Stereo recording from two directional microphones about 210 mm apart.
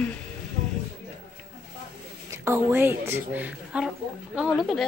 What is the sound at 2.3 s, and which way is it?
A woman's voice, 15° right (ahead or behind).